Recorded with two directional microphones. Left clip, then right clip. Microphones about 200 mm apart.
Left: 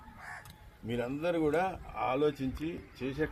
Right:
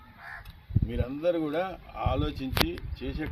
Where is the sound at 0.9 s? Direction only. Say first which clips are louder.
Right 4 dB; 60° left (ahead or behind).